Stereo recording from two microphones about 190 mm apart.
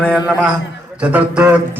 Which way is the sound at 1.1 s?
10° right (ahead or behind).